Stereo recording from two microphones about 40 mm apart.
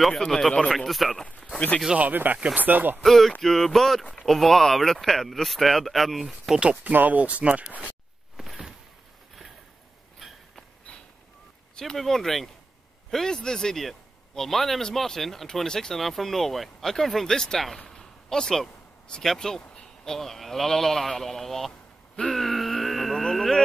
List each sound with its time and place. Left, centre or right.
0.1 s a man's voice: centre
0.7 s speech: centre
2.0 s speech: right
3.0 s a man's voice: centre
6.5 s speech: centre
6.8 s speech: right
8.4 s a sound: centre
10.1 s a sound: centre
12.0 s a man's voice: centre
16.0 s speech: centre
17.8 s a sound: centre
19.2 s a man's voice: centre
22.3 s a sound: centre